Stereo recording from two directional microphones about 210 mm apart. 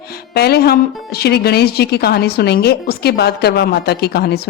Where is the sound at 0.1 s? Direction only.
50° left (ahead or behind).